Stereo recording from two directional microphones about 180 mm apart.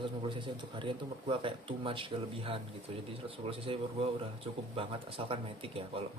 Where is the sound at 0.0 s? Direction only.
25° right (ahead or behind).